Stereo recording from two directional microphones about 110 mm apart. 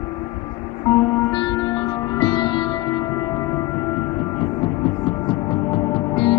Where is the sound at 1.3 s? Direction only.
45° left (ahead or behind).